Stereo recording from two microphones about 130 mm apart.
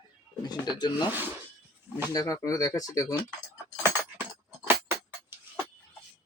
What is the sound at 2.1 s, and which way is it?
A man's voice, 25° left (ahead or behind).